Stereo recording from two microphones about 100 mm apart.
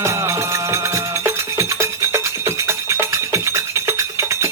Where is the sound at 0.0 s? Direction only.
30° right (ahead or behind).